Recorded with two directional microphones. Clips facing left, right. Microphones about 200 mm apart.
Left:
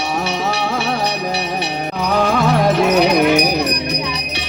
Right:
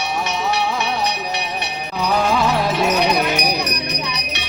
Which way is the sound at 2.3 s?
50° left (ahead or behind).